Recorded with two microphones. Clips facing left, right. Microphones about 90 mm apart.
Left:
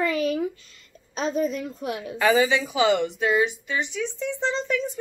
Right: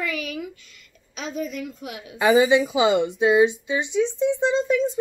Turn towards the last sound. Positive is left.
turn(degrees=-20)  # may be behind; listen again after turning